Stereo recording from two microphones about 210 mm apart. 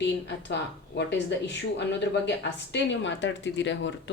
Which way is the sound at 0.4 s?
55° left (ahead or behind).